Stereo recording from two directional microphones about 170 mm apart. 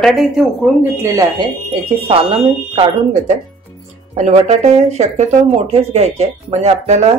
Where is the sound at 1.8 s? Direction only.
35° right (ahead or behind).